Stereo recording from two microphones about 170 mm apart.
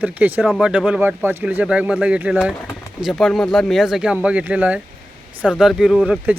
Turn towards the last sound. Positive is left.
turn(degrees=-5)  # may be behind; listen again after turning